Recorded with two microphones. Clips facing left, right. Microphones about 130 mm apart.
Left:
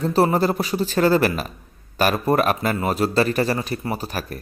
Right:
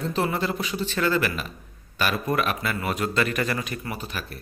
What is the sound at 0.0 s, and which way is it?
A man's voice, 40° left (ahead or behind).